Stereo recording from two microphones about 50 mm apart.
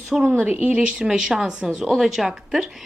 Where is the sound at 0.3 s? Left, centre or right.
Right.